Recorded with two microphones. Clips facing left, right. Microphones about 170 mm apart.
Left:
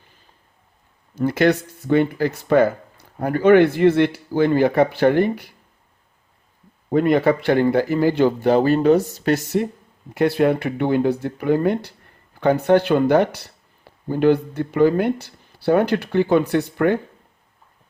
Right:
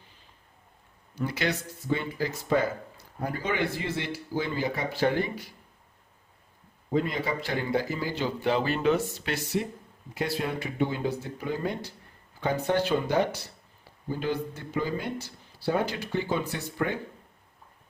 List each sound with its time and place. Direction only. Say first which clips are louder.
1.1 s speech: left 12 dB; 50° left (ahead or behind)
6.9 s speech: left 11 dB; 60° left (ahead or behind)
10.2 s speech: left 13 dB; 60° left (ahead or behind)